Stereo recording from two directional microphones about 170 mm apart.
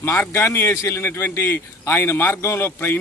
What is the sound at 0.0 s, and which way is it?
A man's voice, 15° left (ahead or behind).